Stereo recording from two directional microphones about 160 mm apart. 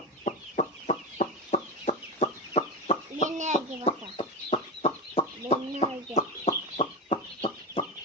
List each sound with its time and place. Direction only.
0.3 s fowl: 45° left (ahead or behind)
3.2 s bird: 50° right (ahead or behind)
4.2 s chicken: 40° left (ahead or behind)